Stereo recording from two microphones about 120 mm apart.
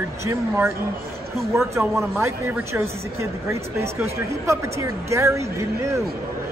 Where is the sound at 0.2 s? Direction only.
20° right (ahead or behind).